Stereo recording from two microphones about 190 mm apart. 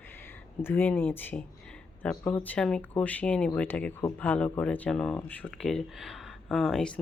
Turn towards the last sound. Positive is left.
turn(degrees=5)  # may be behind; listen again after turning